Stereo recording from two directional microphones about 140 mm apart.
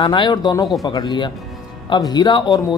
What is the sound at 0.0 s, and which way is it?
Speech, 35° left (ahead or behind).